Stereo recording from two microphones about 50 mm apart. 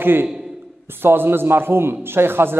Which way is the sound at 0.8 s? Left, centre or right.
Right.